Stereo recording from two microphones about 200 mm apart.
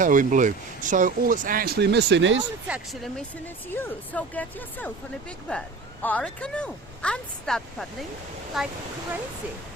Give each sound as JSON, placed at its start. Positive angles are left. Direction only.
{"t": 0.0, "sound": "speech", "side_deg": -40}
{"t": 2.6, "sound": "speech", "side_deg": -5}